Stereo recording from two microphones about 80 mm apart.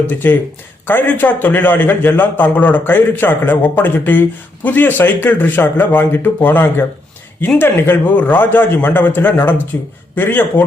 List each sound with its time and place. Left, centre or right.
0.1 s a man's voice: left